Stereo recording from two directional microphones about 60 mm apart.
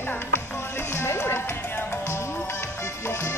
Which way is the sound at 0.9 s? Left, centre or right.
Left.